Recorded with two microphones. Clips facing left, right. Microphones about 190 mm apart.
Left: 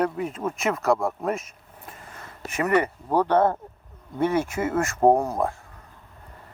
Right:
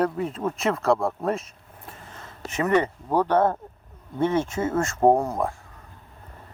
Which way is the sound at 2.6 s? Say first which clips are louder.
Even; 10° left (ahead or behind).